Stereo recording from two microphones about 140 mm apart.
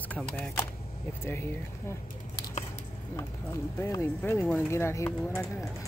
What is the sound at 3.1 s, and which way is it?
Speech, 25° left (ahead or behind).